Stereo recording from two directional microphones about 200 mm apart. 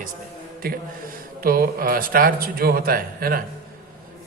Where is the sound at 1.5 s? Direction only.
45° right (ahead or behind).